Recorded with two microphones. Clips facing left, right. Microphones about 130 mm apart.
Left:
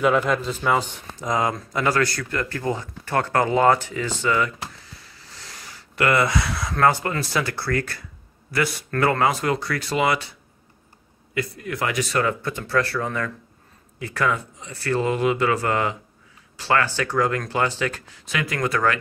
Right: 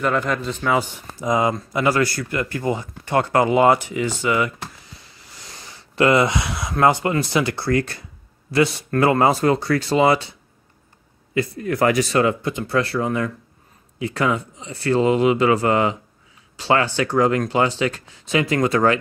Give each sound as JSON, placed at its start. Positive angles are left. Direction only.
{"t": 0.0, "sound": "speech", "side_deg": 5}
{"t": 0.7, "sound": "speech", "side_deg": -10}
{"t": 9.2, "sound": "speech", "side_deg": -30}
{"t": 11.6, "sound": "speech", "side_deg": -40}
{"t": 12.1, "sound": "speech", "side_deg": -20}